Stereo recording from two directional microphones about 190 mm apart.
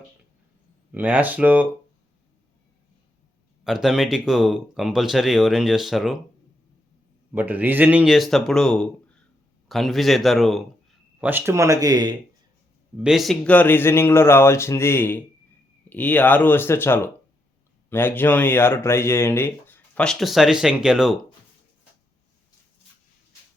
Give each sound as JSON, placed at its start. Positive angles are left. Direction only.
{"t": 0.9, "sound": "speech", "side_deg": -10}
{"t": 3.6, "sound": "speech", "side_deg": 0}
{"t": 7.3, "sound": "speech", "side_deg": -10}
{"t": 13.0, "sound": "speech", "side_deg": 0}